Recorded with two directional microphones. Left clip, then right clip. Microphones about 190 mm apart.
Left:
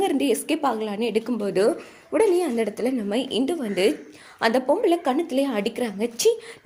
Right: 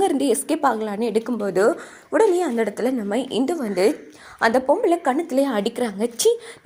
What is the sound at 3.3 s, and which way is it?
Speech, 25° right (ahead or behind).